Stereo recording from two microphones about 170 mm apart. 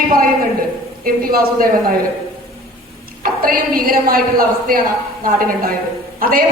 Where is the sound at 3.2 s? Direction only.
60° right (ahead or behind).